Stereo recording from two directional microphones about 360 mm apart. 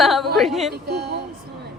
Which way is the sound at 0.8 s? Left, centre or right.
Right.